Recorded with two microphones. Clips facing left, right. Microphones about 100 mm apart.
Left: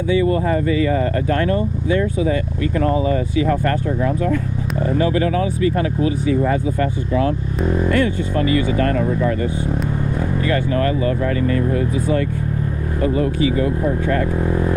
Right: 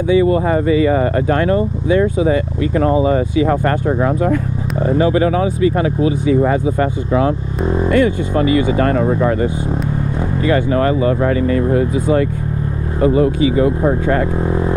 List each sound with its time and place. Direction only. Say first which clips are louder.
0.1 s speech: right 4 dB; 25° right (ahead or behind)
4.8 s speech: right 4 dB; 25° right (ahead or behind)
8.9 s speech: right 4 dB; 55° right (ahead or behind)
10.4 s speech: right 6 dB; 25° right (ahead or behind)